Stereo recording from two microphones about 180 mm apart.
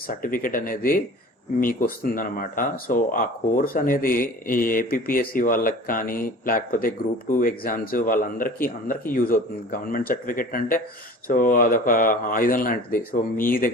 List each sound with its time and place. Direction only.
0.1 s speech: 50° left (ahead or behind)